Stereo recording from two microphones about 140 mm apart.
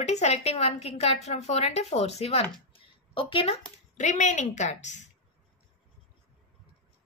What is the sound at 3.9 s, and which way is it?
A woman's voice, 60° left (ahead or behind).